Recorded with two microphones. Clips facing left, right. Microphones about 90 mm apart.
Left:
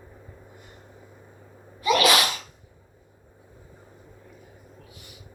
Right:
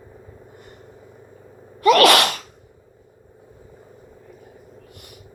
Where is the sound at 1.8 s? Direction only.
60° right (ahead or behind).